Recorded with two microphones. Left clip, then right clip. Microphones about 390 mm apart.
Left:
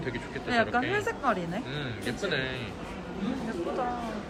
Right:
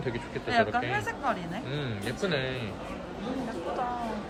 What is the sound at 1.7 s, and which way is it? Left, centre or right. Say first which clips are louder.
Speech: even; centre.